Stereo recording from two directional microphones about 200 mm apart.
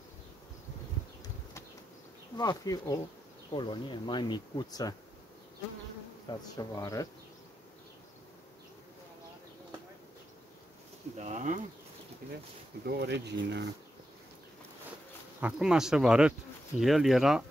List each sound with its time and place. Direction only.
2.3 s speech: 20° left (ahead or behind)
6.5 s speech: 15° left (ahead or behind)
11.1 s insect: 35° right (ahead or behind)
12.8 s speech: 55° right (ahead or behind)
15.4 s speech: 5° right (ahead or behind)